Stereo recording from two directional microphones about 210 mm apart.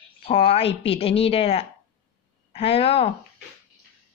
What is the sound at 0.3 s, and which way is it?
Speech, 25° left (ahead or behind).